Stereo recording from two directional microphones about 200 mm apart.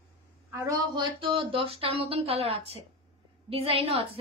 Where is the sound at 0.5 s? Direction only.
20° right (ahead or behind).